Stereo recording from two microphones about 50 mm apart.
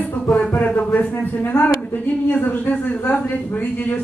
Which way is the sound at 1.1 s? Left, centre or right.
Left.